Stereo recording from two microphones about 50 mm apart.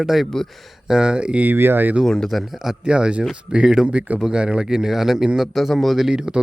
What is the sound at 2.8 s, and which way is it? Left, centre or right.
A man's voice, centre.